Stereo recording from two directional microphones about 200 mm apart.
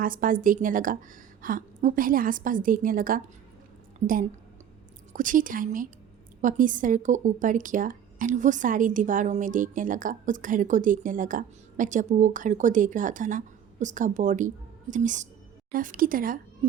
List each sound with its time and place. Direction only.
0.0 s a woman's voice: 45° right (ahead or behind)